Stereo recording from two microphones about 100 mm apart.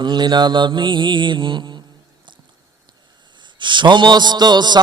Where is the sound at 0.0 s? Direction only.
45° right (ahead or behind).